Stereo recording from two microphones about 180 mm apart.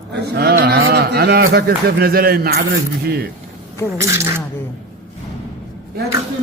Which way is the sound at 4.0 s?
15° right (ahead or behind).